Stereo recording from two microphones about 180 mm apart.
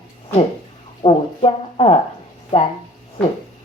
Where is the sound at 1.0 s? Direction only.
35° left (ahead or behind).